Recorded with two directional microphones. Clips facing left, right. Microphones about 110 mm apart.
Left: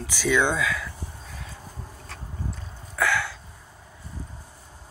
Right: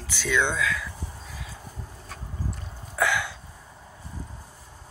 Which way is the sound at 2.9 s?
20° right (ahead or behind).